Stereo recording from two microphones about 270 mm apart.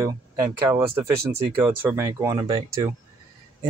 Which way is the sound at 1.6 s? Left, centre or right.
Centre.